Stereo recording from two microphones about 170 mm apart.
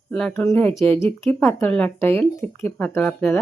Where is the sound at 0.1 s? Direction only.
5° left (ahead or behind).